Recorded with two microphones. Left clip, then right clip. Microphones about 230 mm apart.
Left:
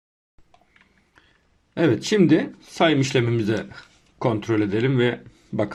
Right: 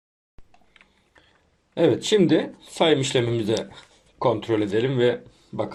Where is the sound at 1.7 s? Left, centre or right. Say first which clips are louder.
Right 1 dB; left.